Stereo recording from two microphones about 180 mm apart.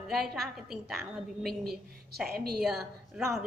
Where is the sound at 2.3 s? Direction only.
60° right (ahead or behind).